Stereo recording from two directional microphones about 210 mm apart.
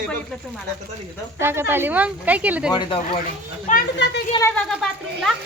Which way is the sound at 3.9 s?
55° left (ahead or behind).